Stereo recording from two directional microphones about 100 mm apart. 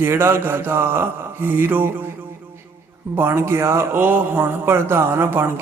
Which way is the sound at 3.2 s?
25° right (ahead or behind).